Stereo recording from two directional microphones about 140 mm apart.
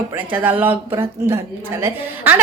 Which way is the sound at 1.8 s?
15° right (ahead or behind).